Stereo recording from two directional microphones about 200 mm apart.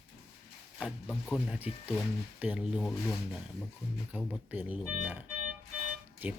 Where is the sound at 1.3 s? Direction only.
5° right (ahead or behind).